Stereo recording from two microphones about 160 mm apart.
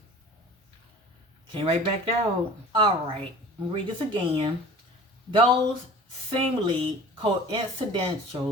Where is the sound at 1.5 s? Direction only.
35° right (ahead or behind).